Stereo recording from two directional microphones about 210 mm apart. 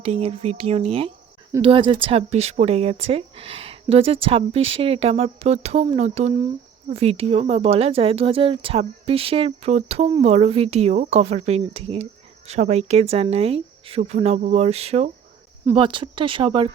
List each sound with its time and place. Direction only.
0.0 s speech: 30° right (ahead or behind)